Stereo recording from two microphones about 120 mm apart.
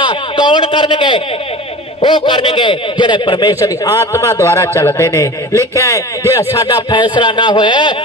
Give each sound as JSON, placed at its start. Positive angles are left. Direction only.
{"t": 0.5, "sound": "a man's voice", "side_deg": 45}
{"t": 3.5, "sound": "a man's voice", "side_deg": 25}
{"t": 6.9, "sound": "a man's voice", "side_deg": 40}